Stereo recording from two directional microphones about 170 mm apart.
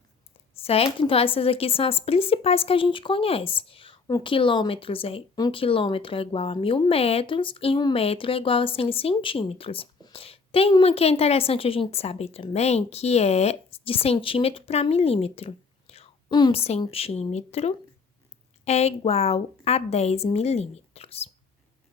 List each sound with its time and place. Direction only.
0.6 s a woman's voice: 35° left (ahead or behind)